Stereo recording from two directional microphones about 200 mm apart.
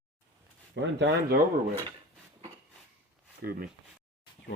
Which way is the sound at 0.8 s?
60° right (ahead or behind).